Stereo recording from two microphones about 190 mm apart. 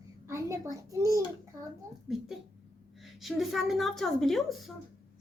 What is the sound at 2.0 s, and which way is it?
A woman's voice, centre (ahead or behind).